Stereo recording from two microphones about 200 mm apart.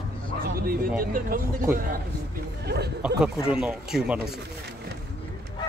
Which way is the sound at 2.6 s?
55° right (ahead or behind).